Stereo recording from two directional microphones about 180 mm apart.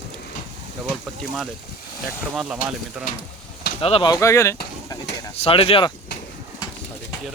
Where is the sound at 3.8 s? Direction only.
30° left (ahead or behind); by 4.6 s 15° left (ahead or behind).